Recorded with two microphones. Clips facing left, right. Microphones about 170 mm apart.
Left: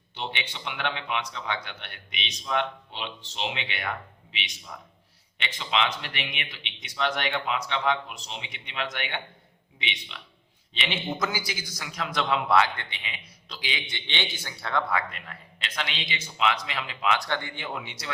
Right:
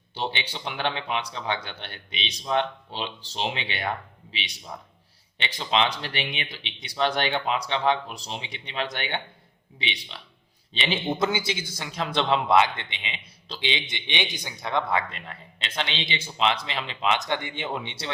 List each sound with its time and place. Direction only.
0.1 s a man's voice: 35° right (ahead or behind)